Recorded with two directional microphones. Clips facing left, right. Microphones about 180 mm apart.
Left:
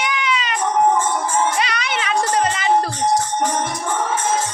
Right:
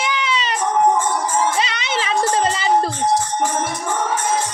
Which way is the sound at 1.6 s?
25° right (ahead or behind).